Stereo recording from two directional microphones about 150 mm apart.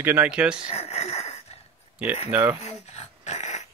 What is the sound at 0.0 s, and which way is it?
Speech, 10° right (ahead or behind).